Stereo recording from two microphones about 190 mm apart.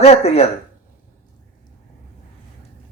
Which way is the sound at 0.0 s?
35° left (ahead or behind).